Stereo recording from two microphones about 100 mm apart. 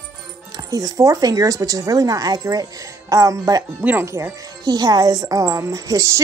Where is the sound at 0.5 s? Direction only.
35° right (ahead or behind).